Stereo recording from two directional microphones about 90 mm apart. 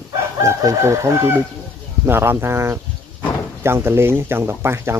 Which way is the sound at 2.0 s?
25° right (ahead or behind).